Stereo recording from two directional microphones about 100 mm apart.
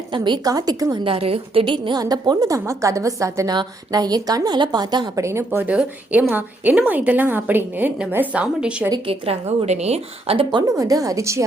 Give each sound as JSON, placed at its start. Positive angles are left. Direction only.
{"t": 0.1, "sound": "a woman's voice", "side_deg": -45}
{"t": 1.0, "sound": "a woman's voice", "side_deg": -70}
{"t": 3.5, "sound": "a woman's voice", "side_deg": -45}
{"t": 5.1, "sound": "a woman's voice", "side_deg": -30}
{"t": 9.0, "sound": "a woman's voice", "side_deg": -75}
{"t": 10.8, "sound": "a woman's voice", "side_deg": -35}